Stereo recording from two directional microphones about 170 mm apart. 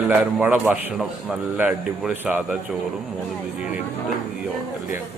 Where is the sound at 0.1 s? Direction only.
5° right (ahead or behind).